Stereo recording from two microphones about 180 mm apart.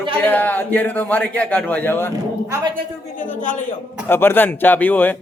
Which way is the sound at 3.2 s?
45° left (ahead or behind).